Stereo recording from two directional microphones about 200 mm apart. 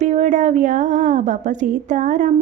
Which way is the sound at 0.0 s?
35° right (ahead or behind).